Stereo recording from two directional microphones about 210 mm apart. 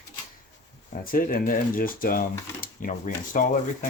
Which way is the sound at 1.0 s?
40° left (ahead or behind).